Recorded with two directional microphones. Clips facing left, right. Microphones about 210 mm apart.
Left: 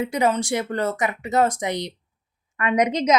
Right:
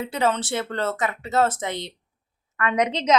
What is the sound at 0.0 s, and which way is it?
A woman's voice, 15° left (ahead or behind).